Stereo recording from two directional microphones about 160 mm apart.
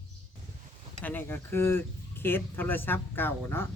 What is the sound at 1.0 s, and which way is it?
Speech, 10° left (ahead or behind).